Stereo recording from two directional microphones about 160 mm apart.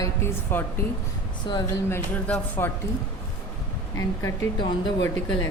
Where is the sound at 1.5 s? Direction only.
30° left (ahead or behind).